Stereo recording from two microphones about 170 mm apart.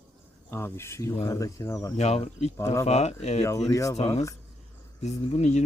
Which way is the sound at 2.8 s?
40° left (ahead or behind).